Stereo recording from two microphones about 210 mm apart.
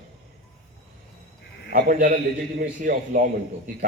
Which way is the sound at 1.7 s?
40° right (ahead or behind).